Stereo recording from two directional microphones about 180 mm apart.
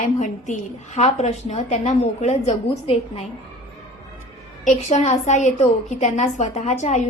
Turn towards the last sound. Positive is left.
turn(degrees=40)  # may be behind; listen again after turning